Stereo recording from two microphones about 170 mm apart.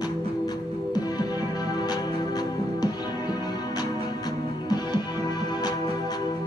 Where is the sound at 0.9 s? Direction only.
25° left (ahead or behind).